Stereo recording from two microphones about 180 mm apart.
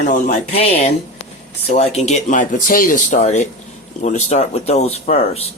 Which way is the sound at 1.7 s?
35° left (ahead or behind).